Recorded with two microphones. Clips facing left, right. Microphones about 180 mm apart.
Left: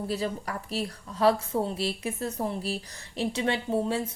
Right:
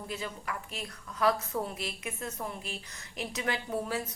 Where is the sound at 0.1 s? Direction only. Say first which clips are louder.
Left 4 dB; 35° left (ahead or behind).